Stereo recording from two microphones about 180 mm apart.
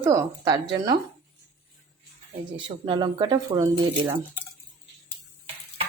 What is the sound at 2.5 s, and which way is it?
Speech, 30° right (ahead or behind).